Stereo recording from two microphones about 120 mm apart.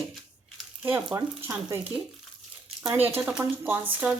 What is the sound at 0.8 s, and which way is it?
Frying, 15° right (ahead or behind).